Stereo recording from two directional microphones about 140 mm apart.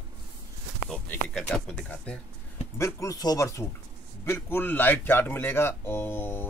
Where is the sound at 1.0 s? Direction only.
10° left (ahead or behind).